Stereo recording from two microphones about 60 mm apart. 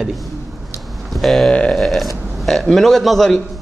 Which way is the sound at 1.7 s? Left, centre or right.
Centre.